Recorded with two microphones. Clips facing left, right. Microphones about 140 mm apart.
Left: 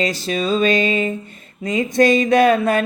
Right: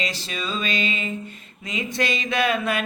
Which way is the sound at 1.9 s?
45° left (ahead or behind).